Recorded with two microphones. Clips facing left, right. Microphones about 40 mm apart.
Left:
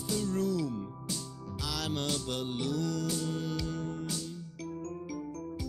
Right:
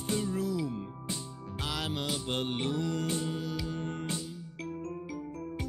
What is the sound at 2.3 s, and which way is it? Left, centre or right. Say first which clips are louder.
Music: right 2 dB; right.